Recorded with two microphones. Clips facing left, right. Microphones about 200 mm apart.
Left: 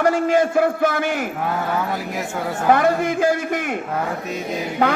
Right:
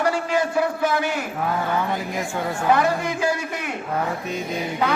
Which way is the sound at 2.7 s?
50° left (ahead or behind).